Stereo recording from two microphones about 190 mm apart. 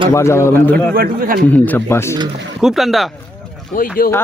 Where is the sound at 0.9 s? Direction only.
50° right (ahead or behind).